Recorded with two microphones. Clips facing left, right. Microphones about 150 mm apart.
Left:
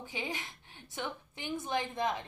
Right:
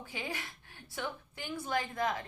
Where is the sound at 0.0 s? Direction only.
20° left (ahead or behind).